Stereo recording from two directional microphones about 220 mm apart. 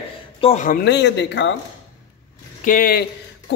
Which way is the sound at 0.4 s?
30° left (ahead or behind).